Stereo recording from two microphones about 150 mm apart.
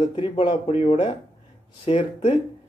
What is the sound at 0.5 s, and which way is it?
Speech, 45° left (ahead or behind).